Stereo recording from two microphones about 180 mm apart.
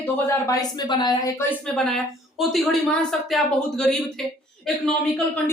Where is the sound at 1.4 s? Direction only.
5° left (ahead or behind).